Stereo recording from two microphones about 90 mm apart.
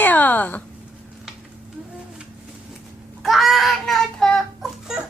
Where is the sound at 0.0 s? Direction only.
20° left (ahead or behind).